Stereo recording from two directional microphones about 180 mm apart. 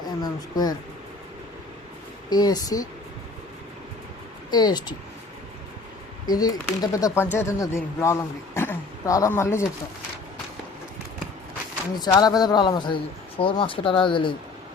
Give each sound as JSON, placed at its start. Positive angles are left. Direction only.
{"t": 0.2, "sound": "a sound", "side_deg": 20}
{"t": 2.3, "sound": "speech", "side_deg": 20}
{"t": 4.5, "sound": "speech", "side_deg": 25}
{"t": 6.2, "sound": "speech", "side_deg": 20}
{"t": 11.9, "sound": "speech", "side_deg": 20}